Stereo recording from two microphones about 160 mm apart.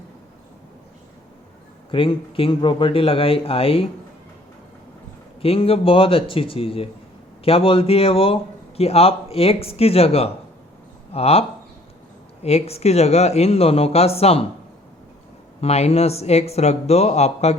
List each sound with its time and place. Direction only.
1.9 s a man's voice: 35° left (ahead or behind)
5.4 s a man's voice: 35° left (ahead or behind)
15.6 s a man's voice: 40° left (ahead or behind)